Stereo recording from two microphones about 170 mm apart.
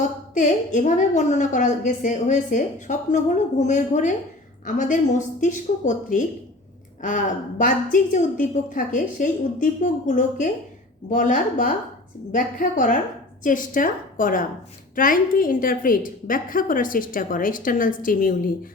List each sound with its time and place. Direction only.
0.3 s a woman's voice: 45° left (ahead or behind)
7.6 s a woman's voice: 50° left (ahead or behind)